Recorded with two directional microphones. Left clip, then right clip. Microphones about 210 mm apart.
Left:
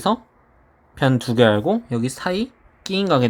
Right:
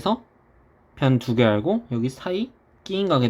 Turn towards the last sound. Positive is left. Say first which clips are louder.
# left 3 dB
turn(degrees=15)  # may be behind; listen again after turning